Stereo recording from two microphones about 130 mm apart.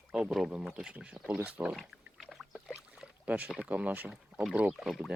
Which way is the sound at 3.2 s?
10° right (ahead or behind).